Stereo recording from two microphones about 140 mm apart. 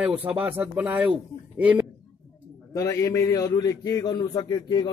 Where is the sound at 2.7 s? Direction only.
25° left (ahead or behind).